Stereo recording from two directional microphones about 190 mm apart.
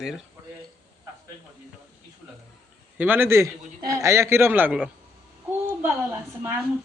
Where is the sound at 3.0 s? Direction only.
10° right (ahead or behind).